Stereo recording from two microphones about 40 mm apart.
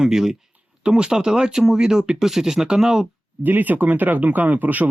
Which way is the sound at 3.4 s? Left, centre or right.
Right.